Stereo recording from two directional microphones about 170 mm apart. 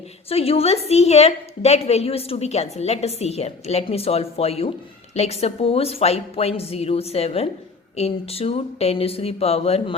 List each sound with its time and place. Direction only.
0.3 s a woman's voice: 35° left (ahead or behind)